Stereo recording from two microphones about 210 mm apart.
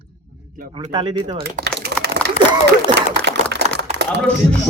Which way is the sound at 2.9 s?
55° right (ahead or behind).